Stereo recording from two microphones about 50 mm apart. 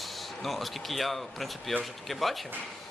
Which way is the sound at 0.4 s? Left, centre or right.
Centre.